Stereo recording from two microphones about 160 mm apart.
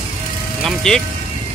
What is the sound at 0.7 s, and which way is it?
Speech, 5° left (ahead or behind).